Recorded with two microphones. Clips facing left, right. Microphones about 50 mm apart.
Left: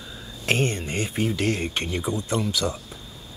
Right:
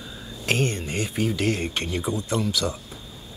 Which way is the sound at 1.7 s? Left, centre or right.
Left.